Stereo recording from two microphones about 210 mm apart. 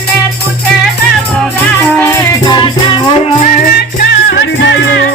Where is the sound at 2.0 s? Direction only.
10° left (ahead or behind).